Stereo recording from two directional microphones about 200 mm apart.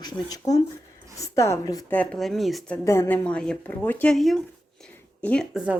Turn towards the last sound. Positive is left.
turn(degrees=-5)  # may be behind; listen again after turning